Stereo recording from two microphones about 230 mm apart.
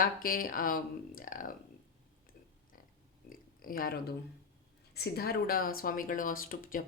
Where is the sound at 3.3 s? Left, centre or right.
Left.